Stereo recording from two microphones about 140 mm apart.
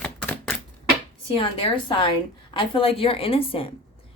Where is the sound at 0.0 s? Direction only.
10° left (ahead or behind).